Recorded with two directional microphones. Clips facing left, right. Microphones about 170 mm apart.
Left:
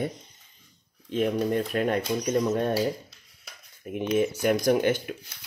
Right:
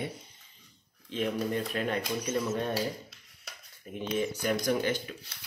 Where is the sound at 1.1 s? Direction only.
45° left (ahead or behind).